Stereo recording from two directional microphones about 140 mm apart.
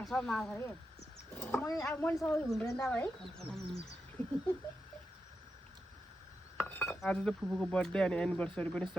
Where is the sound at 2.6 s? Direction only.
25° left (ahead or behind).